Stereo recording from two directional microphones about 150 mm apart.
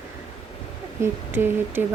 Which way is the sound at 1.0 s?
15° right (ahead or behind).